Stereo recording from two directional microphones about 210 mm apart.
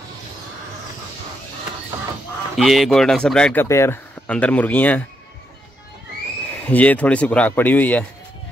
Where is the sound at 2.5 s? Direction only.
Centre (ahead or behind).